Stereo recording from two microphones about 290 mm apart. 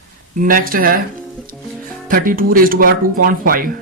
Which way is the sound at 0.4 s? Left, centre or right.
Right.